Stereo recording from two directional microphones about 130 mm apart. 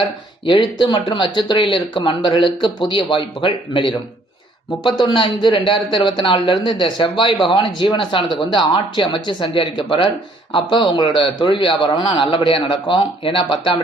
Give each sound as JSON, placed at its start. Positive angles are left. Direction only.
{"t": 0.4, "sound": "a man's voice", "side_deg": 40}